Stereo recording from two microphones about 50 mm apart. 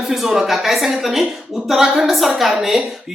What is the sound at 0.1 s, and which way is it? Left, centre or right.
A woman's voice, centre.